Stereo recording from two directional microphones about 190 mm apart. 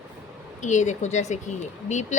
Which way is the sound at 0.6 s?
40° left (ahead or behind).